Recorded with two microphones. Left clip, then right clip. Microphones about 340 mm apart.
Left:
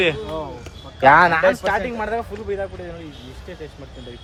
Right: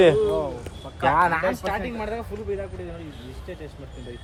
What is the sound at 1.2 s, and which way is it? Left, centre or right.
Speech, left.